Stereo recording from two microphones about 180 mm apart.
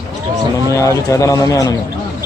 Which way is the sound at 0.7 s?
20° left (ahead or behind).